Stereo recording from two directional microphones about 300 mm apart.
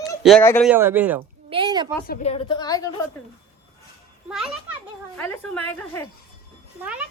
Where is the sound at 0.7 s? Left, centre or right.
Centre.